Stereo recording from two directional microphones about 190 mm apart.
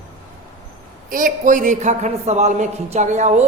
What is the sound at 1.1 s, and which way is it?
A man's voice, 45° right (ahead or behind).